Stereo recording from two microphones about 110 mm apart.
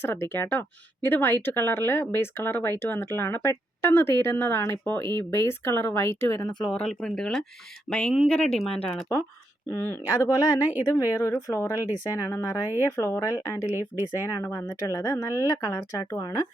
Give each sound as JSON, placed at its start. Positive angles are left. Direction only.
{"t": 0.0, "sound": "speech", "side_deg": 20}
{"t": 6.4, "sound": "speech", "side_deg": 40}
{"t": 6.7, "sound": "speech", "side_deg": 5}
{"t": 9.6, "sound": "speech", "side_deg": 20}